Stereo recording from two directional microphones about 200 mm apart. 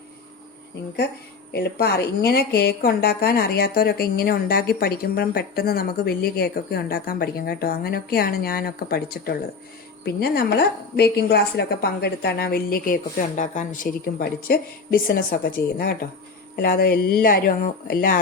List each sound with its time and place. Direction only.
1.5 s a woman's voice: 55° left (ahead or behind)
16.6 s a woman's voice: 50° left (ahead or behind)